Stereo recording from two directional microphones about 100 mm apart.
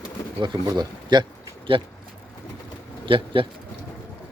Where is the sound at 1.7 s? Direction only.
60° right (ahead or behind).